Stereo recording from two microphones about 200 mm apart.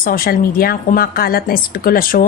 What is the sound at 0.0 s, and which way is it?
A woman's voice, 45° left (ahead or behind).